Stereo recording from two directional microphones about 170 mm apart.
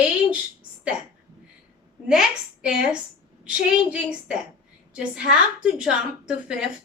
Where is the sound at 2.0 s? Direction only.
5° right (ahead or behind).